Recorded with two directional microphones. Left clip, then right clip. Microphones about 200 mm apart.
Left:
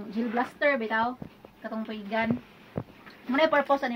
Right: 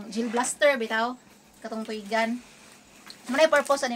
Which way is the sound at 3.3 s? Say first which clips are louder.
Right 2 dB; 15° right (ahead or behind).